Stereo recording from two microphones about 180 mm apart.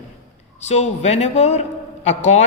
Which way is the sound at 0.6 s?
40° left (ahead or behind).